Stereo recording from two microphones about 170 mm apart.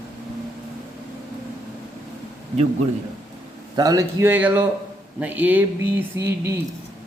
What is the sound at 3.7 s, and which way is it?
A man's voice, 20° right (ahead or behind).